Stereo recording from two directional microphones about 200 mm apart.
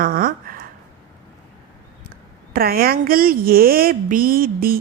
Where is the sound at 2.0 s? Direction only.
50° right (ahead or behind).